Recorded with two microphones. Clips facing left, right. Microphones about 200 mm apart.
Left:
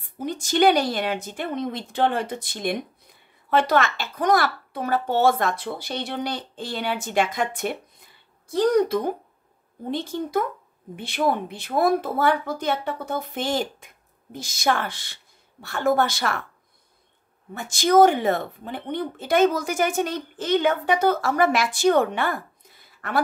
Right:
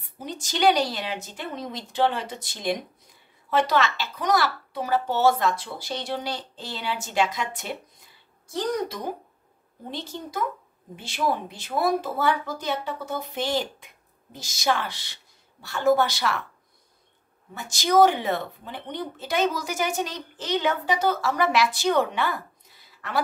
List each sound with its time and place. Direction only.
0.2 s a woman's voice: 55° left (ahead or behind)
17.6 s speech: 50° left (ahead or behind)